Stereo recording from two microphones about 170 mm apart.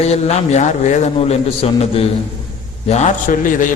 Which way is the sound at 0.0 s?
40° left (ahead or behind).